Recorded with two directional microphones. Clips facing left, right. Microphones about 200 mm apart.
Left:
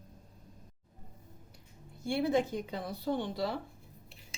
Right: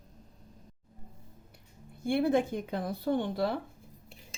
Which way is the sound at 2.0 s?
55° right (ahead or behind).